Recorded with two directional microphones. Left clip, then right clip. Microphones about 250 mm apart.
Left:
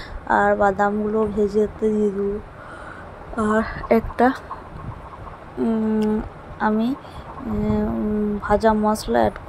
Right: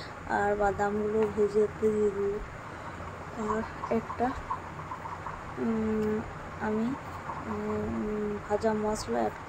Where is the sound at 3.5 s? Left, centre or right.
Left.